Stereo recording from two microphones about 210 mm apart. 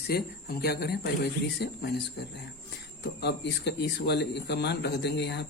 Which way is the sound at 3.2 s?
55° left (ahead or behind).